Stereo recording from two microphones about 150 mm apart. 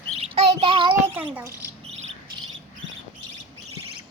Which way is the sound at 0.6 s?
35° right (ahead or behind).